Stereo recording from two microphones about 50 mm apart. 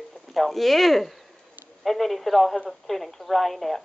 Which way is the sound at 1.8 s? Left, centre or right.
Centre.